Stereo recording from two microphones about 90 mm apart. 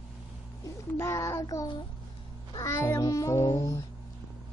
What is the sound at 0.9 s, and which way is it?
Child singing, 30° left (ahead or behind).